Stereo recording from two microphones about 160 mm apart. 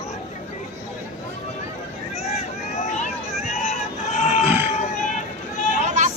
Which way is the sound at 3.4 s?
45° left (ahead or behind).